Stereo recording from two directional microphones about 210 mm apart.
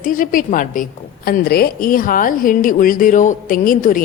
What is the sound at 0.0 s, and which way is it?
A woman's voice, 40° left (ahead or behind).